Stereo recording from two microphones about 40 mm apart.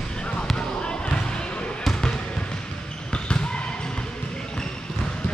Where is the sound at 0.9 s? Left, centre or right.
Left.